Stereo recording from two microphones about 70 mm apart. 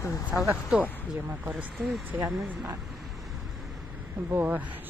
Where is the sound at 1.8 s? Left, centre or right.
Centre.